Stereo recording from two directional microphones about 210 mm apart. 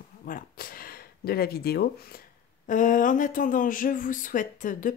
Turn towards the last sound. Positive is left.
turn(degrees=40)  # may be behind; listen again after turning